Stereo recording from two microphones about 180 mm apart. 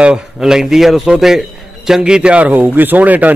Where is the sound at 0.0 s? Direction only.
5° right (ahead or behind).